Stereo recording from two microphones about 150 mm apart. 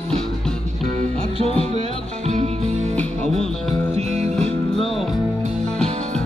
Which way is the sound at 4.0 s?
45° right (ahead or behind).